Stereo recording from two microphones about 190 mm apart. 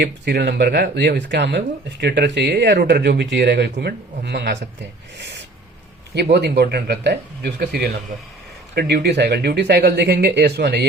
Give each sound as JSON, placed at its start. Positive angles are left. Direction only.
{"t": 0.0, "sound": "speech", "side_deg": -60}
{"t": 6.3, "sound": "speech", "side_deg": -60}